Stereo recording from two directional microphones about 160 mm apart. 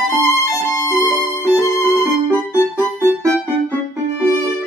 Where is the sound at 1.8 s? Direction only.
15° right (ahead or behind).